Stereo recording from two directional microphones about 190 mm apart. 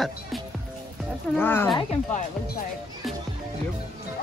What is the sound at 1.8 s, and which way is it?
Speech, 30° left (ahead or behind).